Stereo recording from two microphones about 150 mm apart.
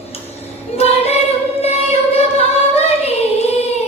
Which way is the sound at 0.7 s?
45° left (ahead or behind).